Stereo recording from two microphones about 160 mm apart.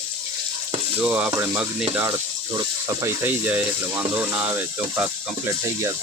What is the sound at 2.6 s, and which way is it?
Speech, 20° right (ahead or behind).